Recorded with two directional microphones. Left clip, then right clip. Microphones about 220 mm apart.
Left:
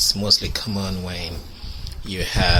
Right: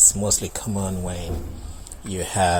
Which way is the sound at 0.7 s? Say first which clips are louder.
Even; 15° right (ahead or behind).